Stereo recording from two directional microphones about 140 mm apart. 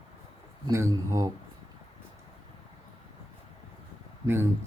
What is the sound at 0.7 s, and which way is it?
Speech, 20° right (ahead or behind).